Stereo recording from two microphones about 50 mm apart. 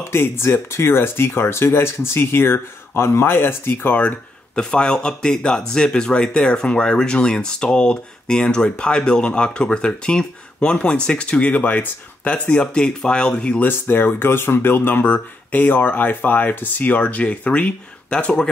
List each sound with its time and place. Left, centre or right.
0.0 s speech: left
4.6 s speech: centre
13.6 s speech: left; by 18.5 s centre